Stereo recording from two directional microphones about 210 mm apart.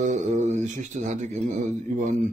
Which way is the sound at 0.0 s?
35° right (ahead or behind).